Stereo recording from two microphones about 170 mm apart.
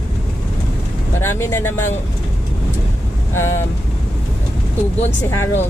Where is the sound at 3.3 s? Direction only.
15° left (ahead or behind).